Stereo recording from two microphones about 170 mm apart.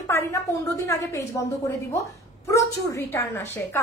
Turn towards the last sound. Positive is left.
turn(degrees=15)  # may be behind; listen again after turning